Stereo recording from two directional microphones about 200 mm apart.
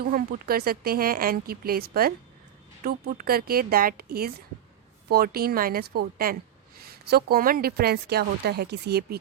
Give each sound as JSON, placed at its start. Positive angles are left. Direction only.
{"t": 0.0, "sound": "a woman's voice", "side_deg": -50}